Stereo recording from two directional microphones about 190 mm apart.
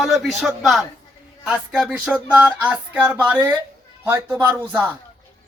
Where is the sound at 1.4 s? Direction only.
5° right (ahead or behind).